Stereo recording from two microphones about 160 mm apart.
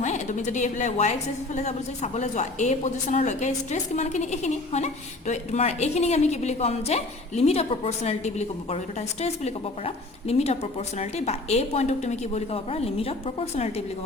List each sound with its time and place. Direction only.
0.0 s a woman's voice: 50° left (ahead or behind)